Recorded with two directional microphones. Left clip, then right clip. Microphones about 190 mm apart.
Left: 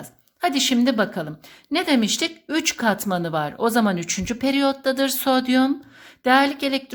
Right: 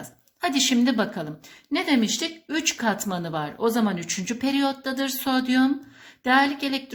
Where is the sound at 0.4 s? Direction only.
30° left (ahead or behind).